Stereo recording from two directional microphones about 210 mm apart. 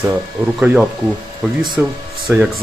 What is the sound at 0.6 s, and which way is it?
Speech, 10° right (ahead or behind).